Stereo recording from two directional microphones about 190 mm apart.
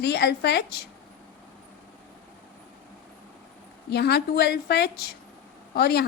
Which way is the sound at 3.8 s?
60° left (ahead or behind).